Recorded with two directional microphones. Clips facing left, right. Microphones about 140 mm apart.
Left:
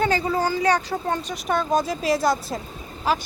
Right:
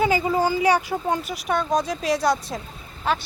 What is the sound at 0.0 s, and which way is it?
Speech, 10° right (ahead or behind).